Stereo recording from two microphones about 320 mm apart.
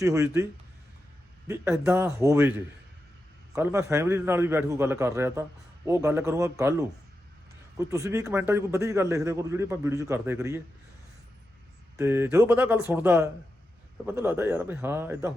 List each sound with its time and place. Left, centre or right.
0.0 s a man's voice: centre
1.5 s a man's voice: centre
3.5 s a man's voice: centre
11.9 s a man's voice: centre